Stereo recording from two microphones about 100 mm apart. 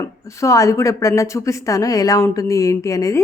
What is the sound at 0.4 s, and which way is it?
A woman's voice, 30° left (ahead or behind).